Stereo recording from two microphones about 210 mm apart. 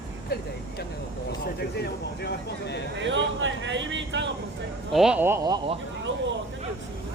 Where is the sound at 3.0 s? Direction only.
60° right (ahead or behind).